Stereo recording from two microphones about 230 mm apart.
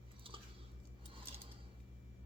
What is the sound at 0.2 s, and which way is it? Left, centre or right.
Chewing, right.